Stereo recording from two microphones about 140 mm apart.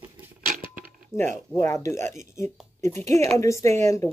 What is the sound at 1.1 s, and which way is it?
Speech, 5° right (ahead or behind).